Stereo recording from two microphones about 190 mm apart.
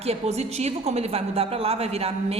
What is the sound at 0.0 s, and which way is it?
A woman's voice, 35° right (ahead or behind).